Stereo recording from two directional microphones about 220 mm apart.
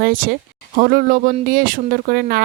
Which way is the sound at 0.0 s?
45° right (ahead or behind).